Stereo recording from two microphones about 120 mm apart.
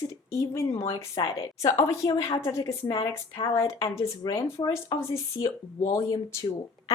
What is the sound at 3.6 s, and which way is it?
Speech, 25° left (ahead or behind).